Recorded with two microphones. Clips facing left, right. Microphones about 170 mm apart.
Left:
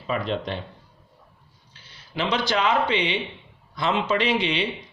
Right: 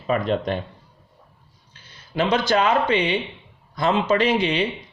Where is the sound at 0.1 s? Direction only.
50° right (ahead or behind).